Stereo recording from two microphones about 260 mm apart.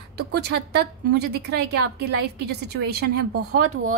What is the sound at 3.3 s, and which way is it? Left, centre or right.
Speech, right.